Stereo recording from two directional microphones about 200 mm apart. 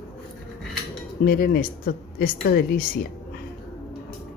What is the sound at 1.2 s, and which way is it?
A woman's voice, 45° left (ahead or behind).